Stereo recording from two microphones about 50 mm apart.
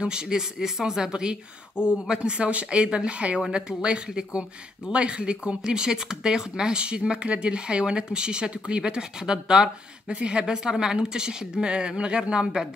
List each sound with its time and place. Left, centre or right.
0.0 s speech: centre